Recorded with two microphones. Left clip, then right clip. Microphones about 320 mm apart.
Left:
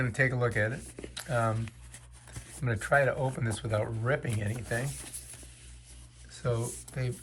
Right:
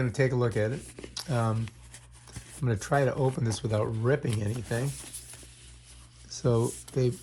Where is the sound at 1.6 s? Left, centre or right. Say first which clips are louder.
Right 2 dB; centre.